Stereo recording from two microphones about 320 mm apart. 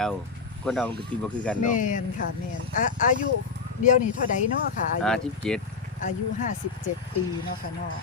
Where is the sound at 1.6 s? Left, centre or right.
Left.